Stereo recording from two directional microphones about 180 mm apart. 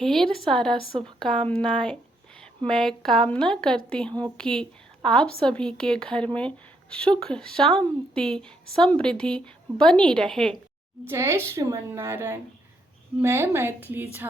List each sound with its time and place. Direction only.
0.0 s a woman's voice: centre (ahead or behind)
11.1 s a woman's voice: 15° right (ahead or behind)